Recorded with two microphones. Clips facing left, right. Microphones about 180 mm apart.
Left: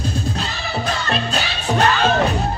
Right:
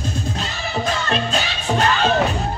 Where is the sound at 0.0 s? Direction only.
35° left (ahead or behind).